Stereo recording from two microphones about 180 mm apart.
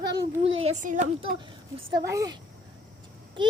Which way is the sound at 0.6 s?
45° right (ahead or behind).